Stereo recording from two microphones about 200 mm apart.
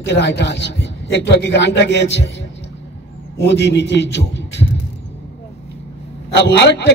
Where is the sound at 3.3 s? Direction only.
60° left (ahead or behind).